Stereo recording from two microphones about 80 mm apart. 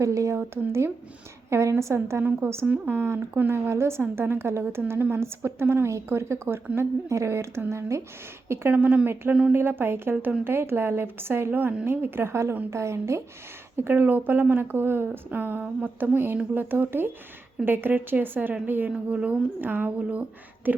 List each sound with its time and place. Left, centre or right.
0.0 s speech: right
8.7 s speech: centre